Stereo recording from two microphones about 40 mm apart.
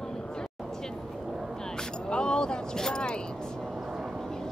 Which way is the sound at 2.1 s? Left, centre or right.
Centre.